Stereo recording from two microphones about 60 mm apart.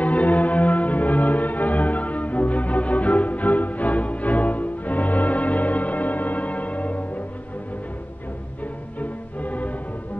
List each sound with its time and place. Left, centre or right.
0.0 s music: left
9.0 s music: left